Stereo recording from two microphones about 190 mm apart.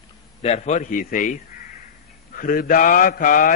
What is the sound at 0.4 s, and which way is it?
A man's voice, 35° left (ahead or behind).